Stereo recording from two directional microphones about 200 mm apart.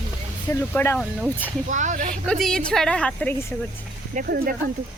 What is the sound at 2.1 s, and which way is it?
A woman's voice, 5° left (ahead or behind).